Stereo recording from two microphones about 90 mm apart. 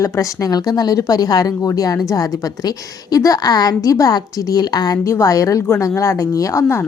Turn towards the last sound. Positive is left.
turn(degrees=30)  # may be behind; listen again after turning